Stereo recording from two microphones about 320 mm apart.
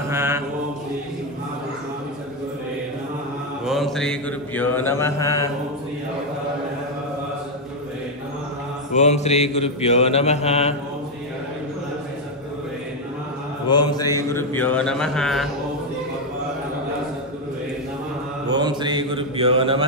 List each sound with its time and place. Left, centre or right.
0.1 s mantra: centre
3.6 s mantra: centre
8.9 s mantra: left
13.7 s mantra: centre
18.5 s mantra: centre